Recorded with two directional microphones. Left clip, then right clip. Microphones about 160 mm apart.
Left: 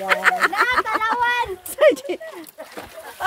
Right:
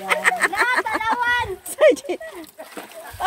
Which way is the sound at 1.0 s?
15° left (ahead or behind).